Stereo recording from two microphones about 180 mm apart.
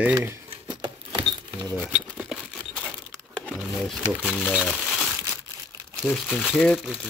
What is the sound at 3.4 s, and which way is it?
Speech, centre (ahead or behind).